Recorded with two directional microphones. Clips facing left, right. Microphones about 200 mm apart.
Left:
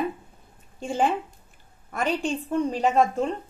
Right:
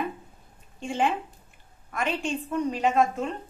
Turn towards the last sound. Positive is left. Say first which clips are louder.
# left 2 dB
turn(degrees=35)  # may be behind; listen again after turning